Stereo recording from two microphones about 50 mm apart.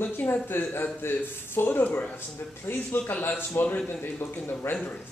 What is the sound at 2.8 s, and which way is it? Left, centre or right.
Speech, left.